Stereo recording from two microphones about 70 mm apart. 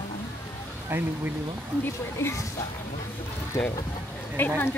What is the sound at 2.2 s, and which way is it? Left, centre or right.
Speech, left.